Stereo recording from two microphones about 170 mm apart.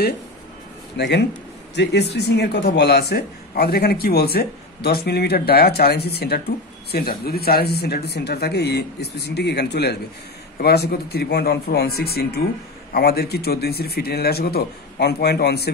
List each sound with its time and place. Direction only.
0.9 s a man's voice: 85° left; by 15.7 s 70° left (ahead or behind)